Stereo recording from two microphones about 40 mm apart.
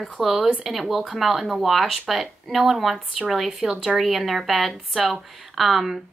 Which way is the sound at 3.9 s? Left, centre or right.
Centre.